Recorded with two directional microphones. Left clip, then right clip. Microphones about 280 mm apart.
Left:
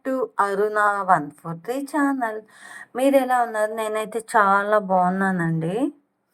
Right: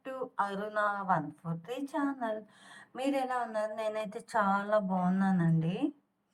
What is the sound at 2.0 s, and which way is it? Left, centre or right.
A woman's voice, left.